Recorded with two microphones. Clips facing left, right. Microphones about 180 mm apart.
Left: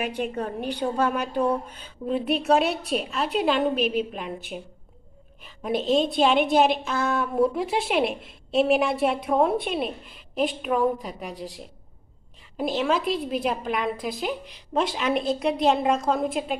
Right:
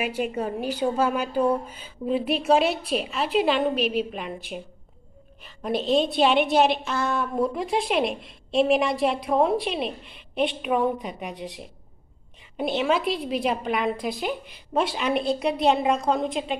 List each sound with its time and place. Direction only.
0.0 s a woman's voice: 5° right (ahead or behind)
5.7 s a woman's voice: 50° left (ahead or behind)
5.9 s a woman's voice: centre (ahead or behind)
12.5 s a woman's voice: centre (ahead or behind)